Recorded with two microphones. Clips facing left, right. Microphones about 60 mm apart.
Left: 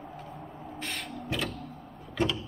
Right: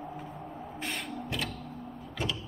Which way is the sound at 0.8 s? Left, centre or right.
Centre.